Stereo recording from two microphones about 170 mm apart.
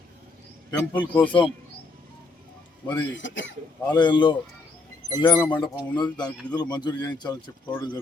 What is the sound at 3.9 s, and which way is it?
A man's voice, 25° left (ahead or behind).